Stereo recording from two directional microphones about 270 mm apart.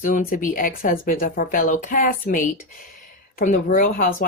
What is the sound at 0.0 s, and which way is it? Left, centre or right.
Speech, left.